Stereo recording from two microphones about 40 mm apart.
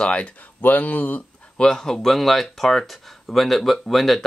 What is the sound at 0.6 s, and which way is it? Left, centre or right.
Speech, left.